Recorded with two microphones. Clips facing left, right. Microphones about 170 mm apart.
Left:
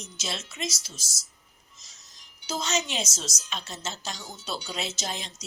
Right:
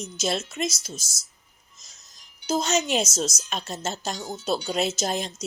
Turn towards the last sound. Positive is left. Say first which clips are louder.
# right 8 dB
turn(degrees=-50)  # may be behind; listen again after turning